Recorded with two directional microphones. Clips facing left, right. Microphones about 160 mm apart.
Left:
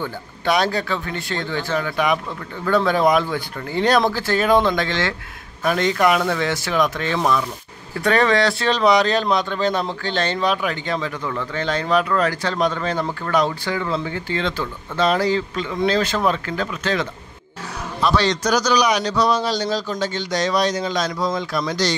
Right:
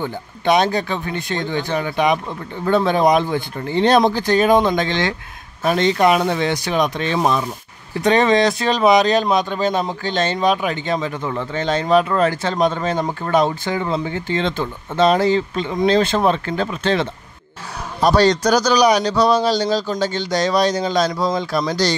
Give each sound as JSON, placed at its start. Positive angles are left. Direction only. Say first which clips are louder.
{"t": 0.0, "sound": "speech", "louder": "right 3 dB", "side_deg": -20}
{"t": 18.0, "sound": "a man's voice", "louder": "right 5 dB", "side_deg": -40}